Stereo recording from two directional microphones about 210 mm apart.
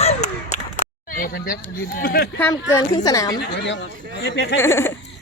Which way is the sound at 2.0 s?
45° left (ahead or behind).